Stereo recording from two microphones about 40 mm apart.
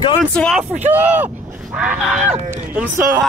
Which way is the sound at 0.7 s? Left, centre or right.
Right.